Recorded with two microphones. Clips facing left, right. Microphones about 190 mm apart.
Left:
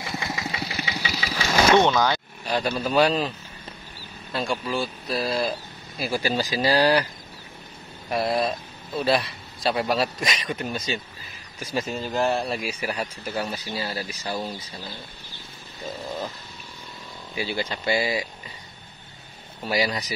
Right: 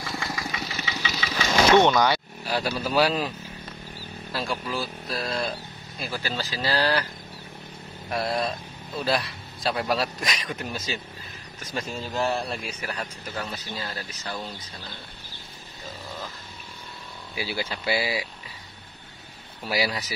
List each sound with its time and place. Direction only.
0.0 s engine: 25° left (ahead or behind)
1.9 s a sound: 5° right (ahead or behind)
2.9 s a man's voice: 5° right (ahead or behind); by 7.1 s 15° left (ahead or behind)
8.1 s a man's voice: centre (ahead or behind)
17.4 s speech: 5° right (ahead or behind)
19.7 s a man's voice: 5° right (ahead or behind)